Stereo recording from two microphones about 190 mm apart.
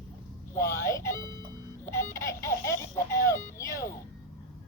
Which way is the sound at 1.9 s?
15° left (ahead or behind).